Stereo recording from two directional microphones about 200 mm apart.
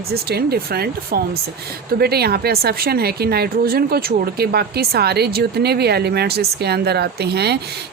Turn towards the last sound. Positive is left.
turn(degrees=-55)  # may be behind; listen again after turning